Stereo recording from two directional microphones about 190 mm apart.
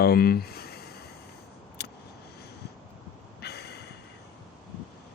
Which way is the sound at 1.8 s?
60° left (ahead or behind).